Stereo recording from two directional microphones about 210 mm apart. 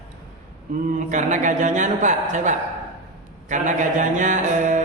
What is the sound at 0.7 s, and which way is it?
A woman's voice, 40° right (ahead or behind).